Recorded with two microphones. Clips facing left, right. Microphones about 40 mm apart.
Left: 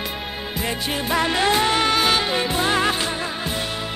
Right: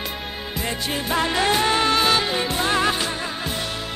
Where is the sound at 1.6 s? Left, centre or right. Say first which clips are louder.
Even; left.